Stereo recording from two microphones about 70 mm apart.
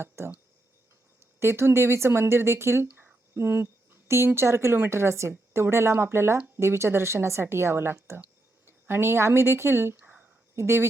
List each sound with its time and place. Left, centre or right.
1.4 s speech: right
3.3 s a sound: right
4.3 s speech: right
10.5 s speech: right